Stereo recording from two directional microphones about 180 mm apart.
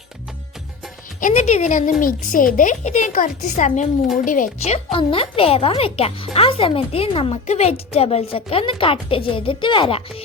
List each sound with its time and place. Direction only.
1.2 s a woman's voice: 40° left (ahead or behind)
2.0 s a woman's voice: 50° left (ahead or behind); by 10.2 s 30° left (ahead or behind)